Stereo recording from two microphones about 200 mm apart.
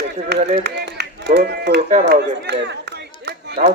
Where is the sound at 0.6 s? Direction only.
55° right (ahead or behind).